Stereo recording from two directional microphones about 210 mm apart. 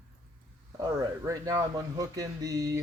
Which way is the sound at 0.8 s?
15° right (ahead or behind).